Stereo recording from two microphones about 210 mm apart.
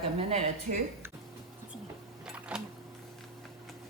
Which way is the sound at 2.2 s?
5° right (ahead or behind).